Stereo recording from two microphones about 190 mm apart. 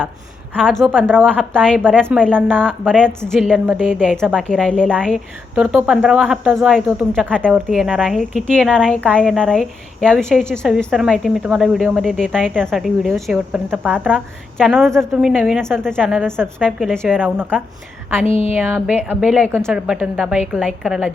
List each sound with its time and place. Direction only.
0.5 s a woman's voice: 5° left (ahead or behind)
17.2 s speech: 10° right (ahead or behind)
18.3 s speech: 30° left (ahead or behind)
18.5 s a woman's voice: 10° right (ahead or behind)